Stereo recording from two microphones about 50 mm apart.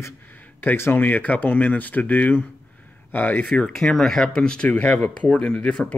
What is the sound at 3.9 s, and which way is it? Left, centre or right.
Speech, centre.